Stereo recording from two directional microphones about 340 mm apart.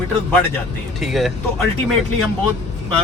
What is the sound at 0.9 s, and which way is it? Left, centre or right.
Speech, centre.